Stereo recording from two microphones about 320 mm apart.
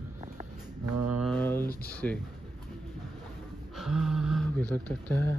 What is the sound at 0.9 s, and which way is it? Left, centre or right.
Mantra, right.